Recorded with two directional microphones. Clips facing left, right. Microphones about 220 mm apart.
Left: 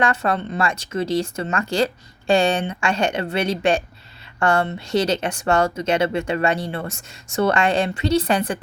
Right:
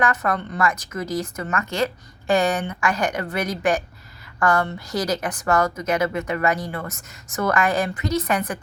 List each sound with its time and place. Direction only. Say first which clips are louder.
0.0 s speech: left 2 dB; 30° left (ahead or behind)